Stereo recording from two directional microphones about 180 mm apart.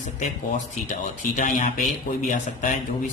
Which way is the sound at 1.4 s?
45° left (ahead or behind).